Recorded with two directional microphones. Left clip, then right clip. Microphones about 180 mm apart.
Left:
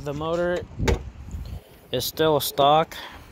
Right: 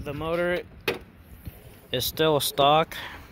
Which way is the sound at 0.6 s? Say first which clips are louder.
Left 3 dB; 15° left (ahead or behind).